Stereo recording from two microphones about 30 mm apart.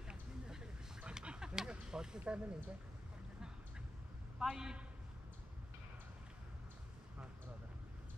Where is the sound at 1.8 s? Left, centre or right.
Right.